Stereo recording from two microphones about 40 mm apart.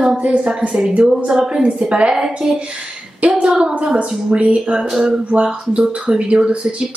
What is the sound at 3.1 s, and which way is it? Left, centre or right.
A woman's voice, right.